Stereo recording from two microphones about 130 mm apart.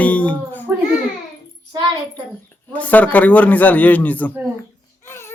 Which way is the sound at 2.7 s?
10° left (ahead or behind).